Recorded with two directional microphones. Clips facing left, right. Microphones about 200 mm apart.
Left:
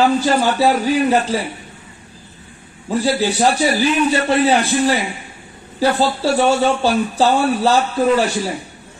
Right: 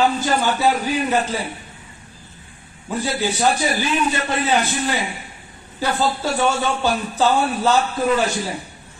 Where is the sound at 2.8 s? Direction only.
35° left (ahead or behind).